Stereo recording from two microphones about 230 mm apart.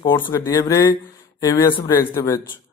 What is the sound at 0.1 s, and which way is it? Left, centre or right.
Speech, centre.